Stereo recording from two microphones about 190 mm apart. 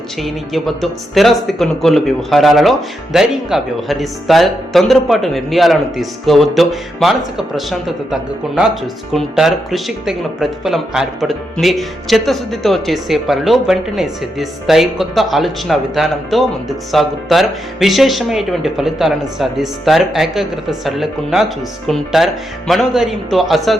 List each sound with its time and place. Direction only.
0.2 s speech: centre (ahead or behind)